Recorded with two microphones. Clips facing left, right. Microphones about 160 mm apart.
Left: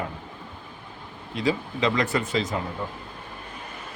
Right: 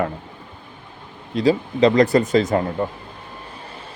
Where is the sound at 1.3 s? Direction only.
35° right (ahead or behind).